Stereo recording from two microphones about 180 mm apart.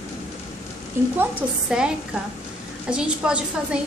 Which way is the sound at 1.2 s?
5° right (ahead or behind).